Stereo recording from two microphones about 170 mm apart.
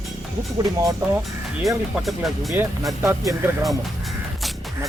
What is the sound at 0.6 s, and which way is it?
Speech, 20° right (ahead or behind).